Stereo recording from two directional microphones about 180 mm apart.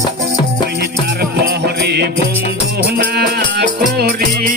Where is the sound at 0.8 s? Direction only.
65° right (ahead or behind).